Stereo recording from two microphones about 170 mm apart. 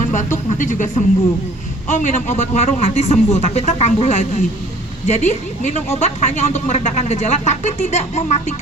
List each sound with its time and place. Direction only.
0.0 s music: 45° left (ahead or behind)
0.6 s a woman's voice: 50° left (ahead or behind)